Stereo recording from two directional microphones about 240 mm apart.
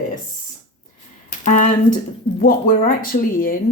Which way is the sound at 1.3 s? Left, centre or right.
Left.